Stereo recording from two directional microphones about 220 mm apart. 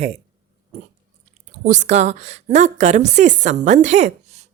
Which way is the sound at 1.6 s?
35° right (ahead or behind).